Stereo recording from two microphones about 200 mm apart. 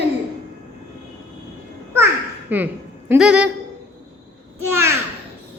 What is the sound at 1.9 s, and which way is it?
Babbling, 10° right (ahead or behind).